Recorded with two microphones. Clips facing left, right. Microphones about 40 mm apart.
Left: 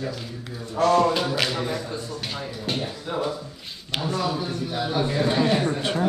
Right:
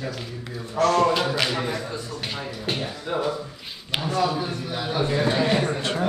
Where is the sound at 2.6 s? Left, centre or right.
Centre.